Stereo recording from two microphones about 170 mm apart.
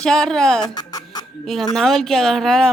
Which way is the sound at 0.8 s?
25° left (ahead or behind).